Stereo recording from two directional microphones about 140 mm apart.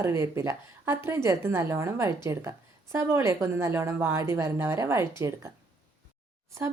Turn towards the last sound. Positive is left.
turn(degrees=-20)  # may be behind; listen again after turning